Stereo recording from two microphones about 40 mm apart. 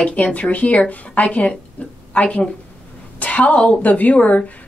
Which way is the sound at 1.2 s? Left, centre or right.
Left.